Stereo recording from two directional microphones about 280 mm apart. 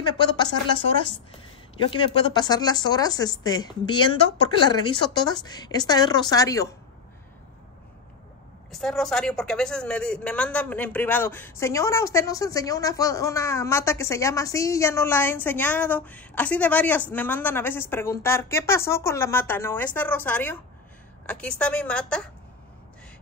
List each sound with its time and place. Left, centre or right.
0.0 s speech: centre
1.8 s speech: centre
8.7 s a woman's voice: centre